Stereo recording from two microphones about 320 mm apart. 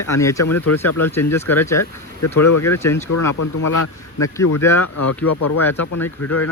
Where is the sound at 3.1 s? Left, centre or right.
Left.